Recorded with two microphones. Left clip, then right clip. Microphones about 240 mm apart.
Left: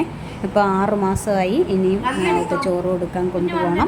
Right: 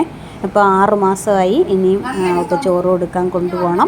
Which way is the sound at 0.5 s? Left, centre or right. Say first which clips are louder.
Right 7 dB; centre.